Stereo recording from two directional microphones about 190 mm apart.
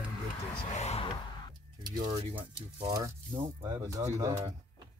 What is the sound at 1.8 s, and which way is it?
Speech, 25° right (ahead or behind).